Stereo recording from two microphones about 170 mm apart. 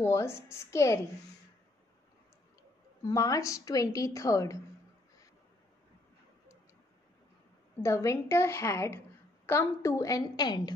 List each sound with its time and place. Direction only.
0.0 s a woman's voice: 15° left (ahead or behind)
3.0 s a woman's voice: 20° left (ahead or behind)
7.8 s a woman's voice: 15° left (ahead or behind)